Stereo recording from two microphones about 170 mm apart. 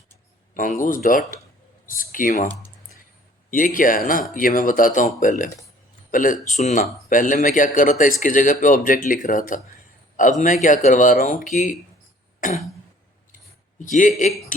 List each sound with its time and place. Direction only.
0.5 s speech: 50° left (ahead or behind)
3.5 s speech: 55° left (ahead or behind)